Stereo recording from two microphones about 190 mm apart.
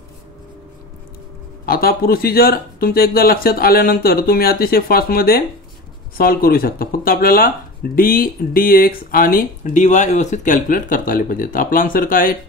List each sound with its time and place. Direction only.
1.7 s speech: 50° left (ahead or behind)